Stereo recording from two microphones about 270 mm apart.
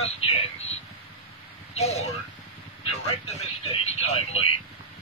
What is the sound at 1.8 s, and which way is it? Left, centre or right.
Speech, left.